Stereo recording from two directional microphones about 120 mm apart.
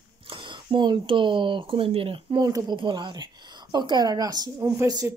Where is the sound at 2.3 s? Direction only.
35° right (ahead or behind).